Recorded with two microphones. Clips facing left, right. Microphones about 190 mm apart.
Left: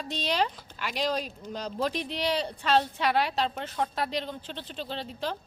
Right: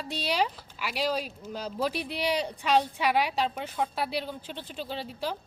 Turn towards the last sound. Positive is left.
turn(degrees=-10)  # may be behind; listen again after turning